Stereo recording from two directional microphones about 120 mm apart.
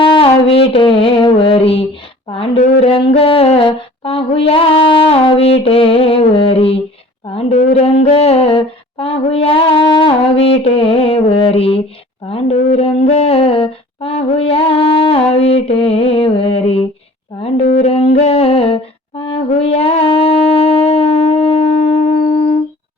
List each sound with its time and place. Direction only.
0.0 s music: 50° left (ahead or behind)
7.5 s a sound: 75° left (ahead or behind); by 16.8 s 55° left (ahead or behind)
17.4 s humming: 55° left (ahead or behind)
19.5 s wind instrument: 60° left (ahead or behind)